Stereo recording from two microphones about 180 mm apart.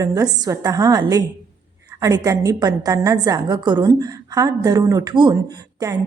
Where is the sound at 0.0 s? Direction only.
20° right (ahead or behind).